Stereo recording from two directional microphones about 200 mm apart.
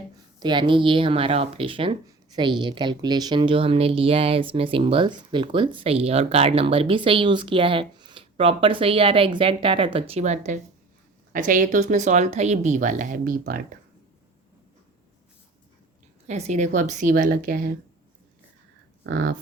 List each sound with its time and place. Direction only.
0.3 s speech: 20° right (ahead or behind); by 13.7 s 45° right (ahead or behind)
16.2 s speech: 35° right (ahead or behind)
19.0 s speech: 50° right (ahead or behind)